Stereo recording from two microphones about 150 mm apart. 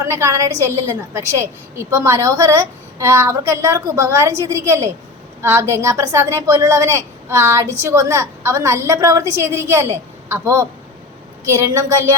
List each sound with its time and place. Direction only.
0.0 s a woman's voice: 20° right (ahead or behind)